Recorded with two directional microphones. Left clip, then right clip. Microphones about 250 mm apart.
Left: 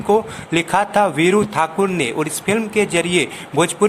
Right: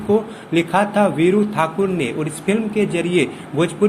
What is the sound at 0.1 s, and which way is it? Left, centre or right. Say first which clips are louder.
A man's voice: left 2 dB; left.